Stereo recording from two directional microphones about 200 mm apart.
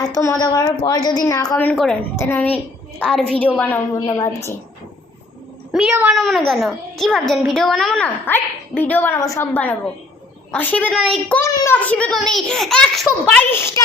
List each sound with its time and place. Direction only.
0.1 s a woman's voice: 15° left (ahead or behind)
1.7 s a child's voice: centre (ahead or behind)
5.7 s a child's voice: 5° right (ahead or behind); by 13.8 s 10° left (ahead or behind)